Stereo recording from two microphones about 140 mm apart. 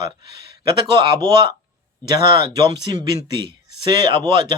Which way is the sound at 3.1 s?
35° right (ahead or behind).